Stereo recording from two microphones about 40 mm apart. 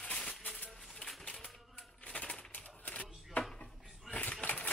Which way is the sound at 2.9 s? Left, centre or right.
Left.